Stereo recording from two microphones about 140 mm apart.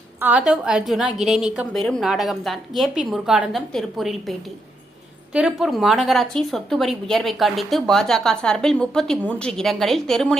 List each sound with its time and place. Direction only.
0.2 s a woman's voice: 10° right (ahead or behind)